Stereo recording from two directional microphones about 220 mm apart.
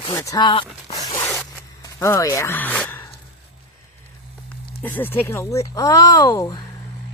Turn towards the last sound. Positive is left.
turn(degrees=15)  # may be behind; listen again after turning